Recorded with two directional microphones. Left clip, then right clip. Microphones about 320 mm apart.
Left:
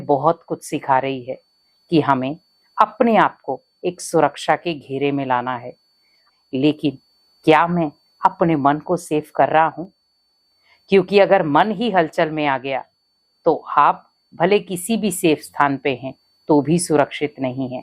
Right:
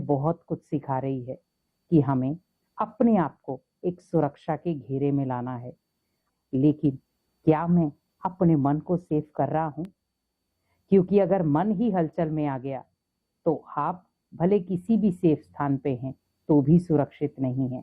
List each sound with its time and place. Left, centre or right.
0.3 s a woman's voice: centre
7.4 s a woman's voice: centre
13.4 s speech: left
13.7 s a woman's voice: centre